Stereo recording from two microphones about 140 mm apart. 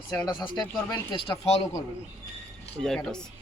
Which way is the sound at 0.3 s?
30° left (ahead or behind).